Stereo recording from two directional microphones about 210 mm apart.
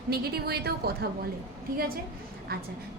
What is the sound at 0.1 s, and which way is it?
Speech, 50° right (ahead or behind).